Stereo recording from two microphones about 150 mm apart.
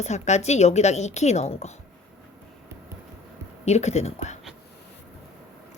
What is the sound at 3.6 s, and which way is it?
Speech, 45° left (ahead or behind).